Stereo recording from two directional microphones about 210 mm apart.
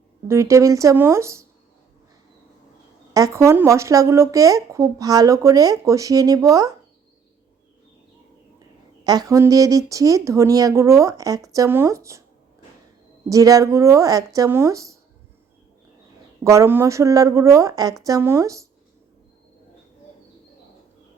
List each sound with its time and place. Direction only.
0.3 s speech: 15° right (ahead or behind)
3.1 s speech: 15° right (ahead or behind)
9.0 s speech: 15° right (ahead or behind)
13.2 s speech: 15° right (ahead or behind)
16.4 s speech: 15° right (ahead or behind)